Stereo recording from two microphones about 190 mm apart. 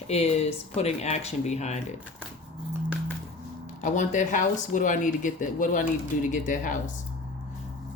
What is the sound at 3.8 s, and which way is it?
Speech, 40° left (ahead or behind).